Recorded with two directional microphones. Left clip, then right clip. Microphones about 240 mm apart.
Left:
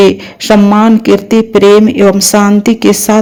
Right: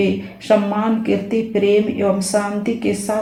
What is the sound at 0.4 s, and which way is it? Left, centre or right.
Speech, left.